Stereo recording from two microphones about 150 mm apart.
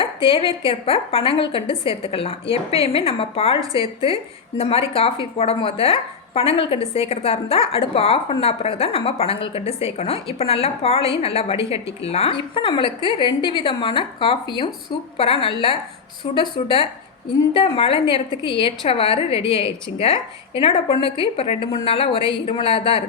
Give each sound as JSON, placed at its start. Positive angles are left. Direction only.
{"t": 0.0, "sound": "a woman's voice", "side_deg": 35}